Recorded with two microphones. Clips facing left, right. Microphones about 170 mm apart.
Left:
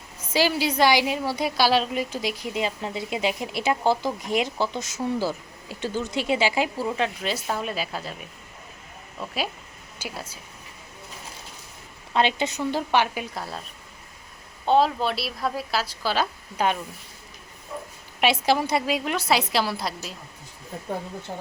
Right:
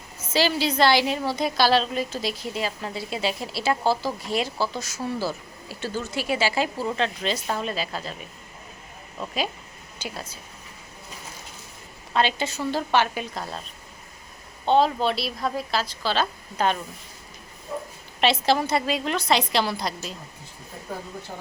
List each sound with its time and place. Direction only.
0.3 s a woman's voice: 10° left (ahead or behind)
10.0 s a woman's voice: 10° left (ahead or behind)
12.1 s a woman's voice: 20° left (ahead or behind)
14.6 s a woman's voice: 5° left (ahead or behind)
18.2 s a woman's voice: 10° left (ahead or behind)